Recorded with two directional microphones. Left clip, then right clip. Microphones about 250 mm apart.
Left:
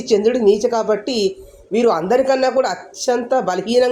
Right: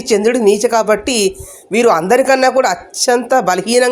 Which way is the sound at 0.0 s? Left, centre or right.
Right.